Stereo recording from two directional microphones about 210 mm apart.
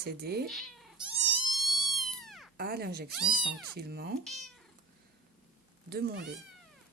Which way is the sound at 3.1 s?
5° right (ahead or behind).